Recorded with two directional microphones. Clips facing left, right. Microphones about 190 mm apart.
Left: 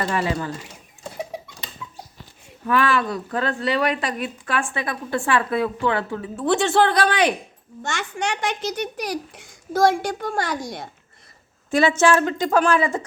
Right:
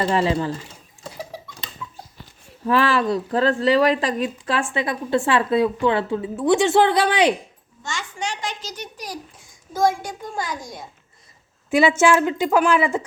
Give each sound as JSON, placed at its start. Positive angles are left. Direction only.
{"t": 0.0, "sound": "speech", "side_deg": -25}
{"t": 2.6, "sound": "speech", "side_deg": -30}
{"t": 7.8, "sound": "a child's voice", "side_deg": 60}
{"t": 11.7, "sound": "speech", "side_deg": -10}